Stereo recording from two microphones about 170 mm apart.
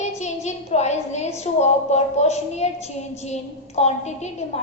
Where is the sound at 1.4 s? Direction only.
40° left (ahead or behind).